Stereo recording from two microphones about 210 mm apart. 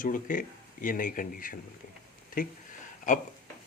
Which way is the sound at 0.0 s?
40° left (ahead or behind).